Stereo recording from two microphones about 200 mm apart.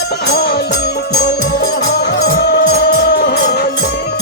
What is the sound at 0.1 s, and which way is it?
Music, 55° left (ahead or behind).